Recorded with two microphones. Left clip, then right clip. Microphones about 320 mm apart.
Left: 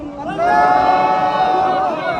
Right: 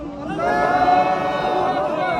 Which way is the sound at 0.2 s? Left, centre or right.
Centre.